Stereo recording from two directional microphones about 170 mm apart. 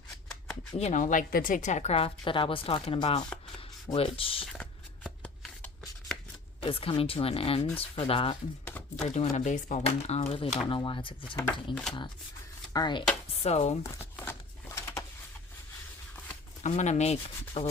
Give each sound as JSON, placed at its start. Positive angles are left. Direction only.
{"t": 0.8, "sound": "a woman's voice", "side_deg": 45}
{"t": 4.4, "sound": "shuffling cards", "side_deg": 5}
{"t": 6.6, "sound": "a woman's voice", "side_deg": 35}
{"t": 8.6, "sound": "a sound", "side_deg": 10}
{"t": 9.0, "sound": "a woman's voice", "side_deg": 45}
{"t": 11.7, "sound": "speech", "side_deg": 5}
{"t": 12.7, "sound": "speech", "side_deg": 25}
{"t": 13.4, "sound": "a woman's voice", "side_deg": 40}
{"t": 14.0, "sound": "a sound", "side_deg": 15}
{"t": 16.6, "sound": "a woman's voice", "side_deg": 45}